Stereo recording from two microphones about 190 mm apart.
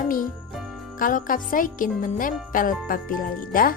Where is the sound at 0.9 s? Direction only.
45° left (ahead or behind).